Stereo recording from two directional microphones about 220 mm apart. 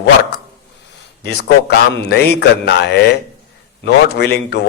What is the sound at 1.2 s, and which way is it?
Speech, 50° left (ahead or behind).